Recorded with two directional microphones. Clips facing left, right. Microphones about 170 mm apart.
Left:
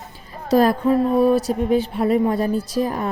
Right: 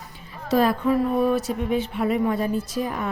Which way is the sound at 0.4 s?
40° left (ahead or behind).